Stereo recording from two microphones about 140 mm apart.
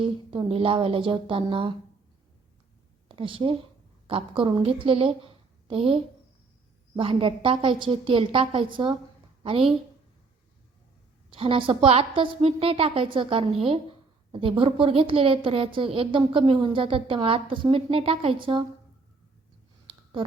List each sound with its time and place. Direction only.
0.0 s a woman's voice: 40° right (ahead or behind)
3.2 s a woman's voice: 40° right (ahead or behind)
11.3 s a woman's voice: 40° right (ahead or behind)